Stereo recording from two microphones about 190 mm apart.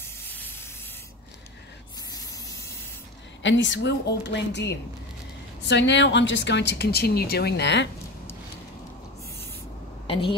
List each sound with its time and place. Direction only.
3.4 s a woman's voice: 75° left (ahead or behind)
10.0 s a woman's voice: 30° left (ahead or behind)